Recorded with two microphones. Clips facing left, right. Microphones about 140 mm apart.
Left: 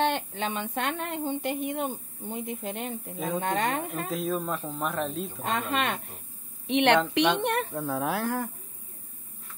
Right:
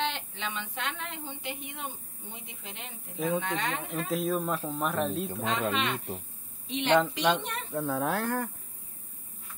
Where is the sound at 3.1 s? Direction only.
Centre (ahead or behind).